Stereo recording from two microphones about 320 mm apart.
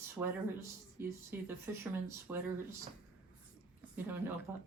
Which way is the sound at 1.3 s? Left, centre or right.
Centre.